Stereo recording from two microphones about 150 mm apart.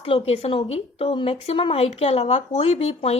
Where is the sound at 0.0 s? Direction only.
40° left (ahead or behind).